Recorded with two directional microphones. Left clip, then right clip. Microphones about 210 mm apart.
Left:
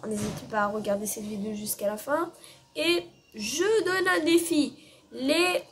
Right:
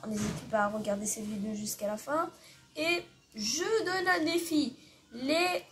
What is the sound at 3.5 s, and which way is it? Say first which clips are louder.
A woman's voice: left 6 dB; 20° left (ahead or behind).